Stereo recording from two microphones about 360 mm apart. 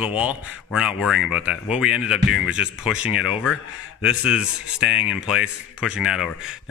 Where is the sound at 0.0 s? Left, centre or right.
Centre.